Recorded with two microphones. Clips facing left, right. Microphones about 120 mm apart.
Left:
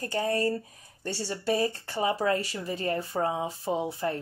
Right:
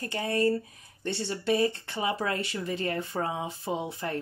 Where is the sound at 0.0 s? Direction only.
35° left (ahead or behind).